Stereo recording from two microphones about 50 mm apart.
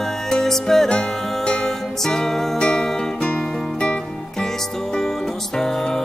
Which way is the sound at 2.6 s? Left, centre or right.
Centre.